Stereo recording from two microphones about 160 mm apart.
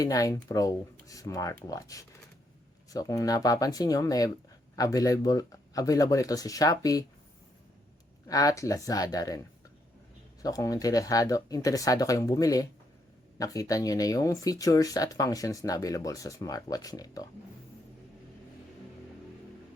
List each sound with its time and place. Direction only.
0.0 s speech: 20° left (ahead or behind)
8.3 s speech: 20° left (ahead or behind)